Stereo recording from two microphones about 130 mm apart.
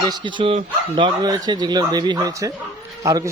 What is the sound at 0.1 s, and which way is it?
Speech, 40° right (ahead or behind).